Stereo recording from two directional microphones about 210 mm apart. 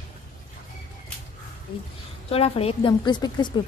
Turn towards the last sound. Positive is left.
turn(degrees=20)  # may be behind; listen again after turning